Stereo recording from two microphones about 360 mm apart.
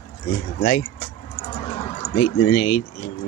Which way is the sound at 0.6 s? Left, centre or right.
Left.